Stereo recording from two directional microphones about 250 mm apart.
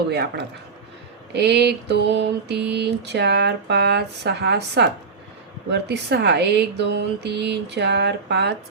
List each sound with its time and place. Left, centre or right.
0.1 s speech: right